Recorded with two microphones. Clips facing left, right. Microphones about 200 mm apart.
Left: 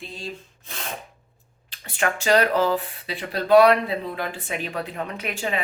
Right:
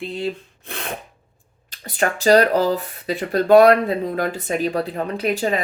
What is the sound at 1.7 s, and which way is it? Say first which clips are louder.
Speech: right 3 dB; 40° right (ahead or behind).